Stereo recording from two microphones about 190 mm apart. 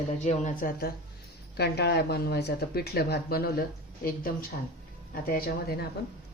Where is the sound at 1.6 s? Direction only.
60° left (ahead or behind).